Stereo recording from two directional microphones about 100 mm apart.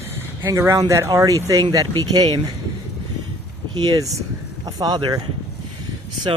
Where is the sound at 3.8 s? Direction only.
40° right (ahead or behind).